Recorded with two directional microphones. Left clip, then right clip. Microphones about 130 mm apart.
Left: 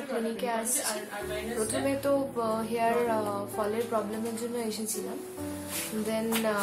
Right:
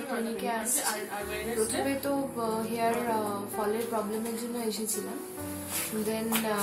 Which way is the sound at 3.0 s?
20° left (ahead or behind).